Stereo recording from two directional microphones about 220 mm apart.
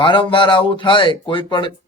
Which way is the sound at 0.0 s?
20° left (ahead or behind).